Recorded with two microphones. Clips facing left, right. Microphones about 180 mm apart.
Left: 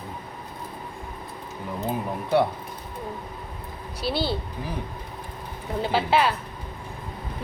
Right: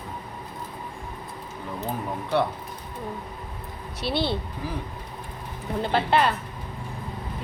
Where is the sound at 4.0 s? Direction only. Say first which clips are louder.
Even; centre (ahead or behind).